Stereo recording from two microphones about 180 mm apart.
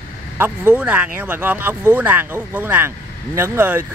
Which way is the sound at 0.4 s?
10° right (ahead or behind).